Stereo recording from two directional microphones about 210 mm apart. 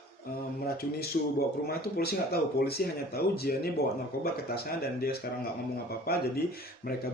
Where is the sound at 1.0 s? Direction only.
45° left (ahead or behind).